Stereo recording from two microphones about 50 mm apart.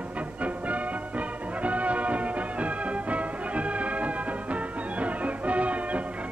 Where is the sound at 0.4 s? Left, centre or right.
Right.